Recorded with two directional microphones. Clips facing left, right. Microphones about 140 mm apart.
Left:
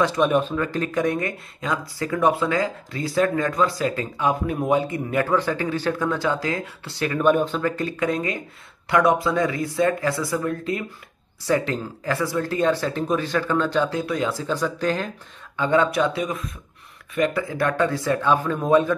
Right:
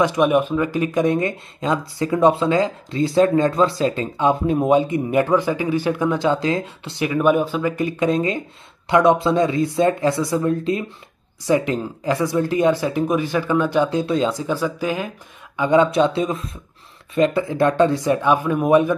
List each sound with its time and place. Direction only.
0.0 s speech: 15° right (ahead or behind)